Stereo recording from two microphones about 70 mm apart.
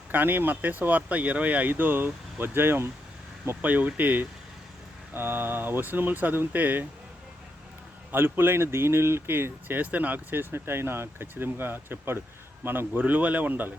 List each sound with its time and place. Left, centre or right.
0.1 s speech: right
8.1 s speech: right